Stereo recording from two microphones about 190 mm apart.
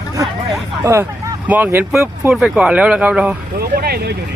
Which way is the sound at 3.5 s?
55° right (ahead or behind).